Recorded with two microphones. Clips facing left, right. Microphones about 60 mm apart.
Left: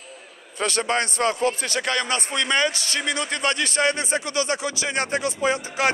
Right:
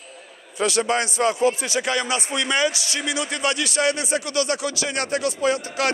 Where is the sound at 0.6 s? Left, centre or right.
Left.